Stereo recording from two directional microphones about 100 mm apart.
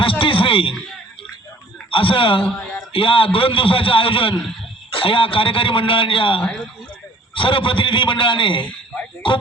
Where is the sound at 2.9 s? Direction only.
65° left (ahead or behind).